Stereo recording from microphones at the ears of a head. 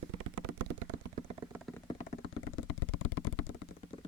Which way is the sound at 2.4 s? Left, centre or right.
Left.